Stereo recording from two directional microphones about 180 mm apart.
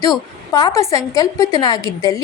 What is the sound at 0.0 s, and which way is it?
A woman's voice, 20° left (ahead or behind).